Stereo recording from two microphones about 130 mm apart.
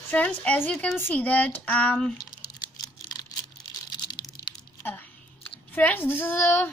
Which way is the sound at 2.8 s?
30° left (ahead or behind).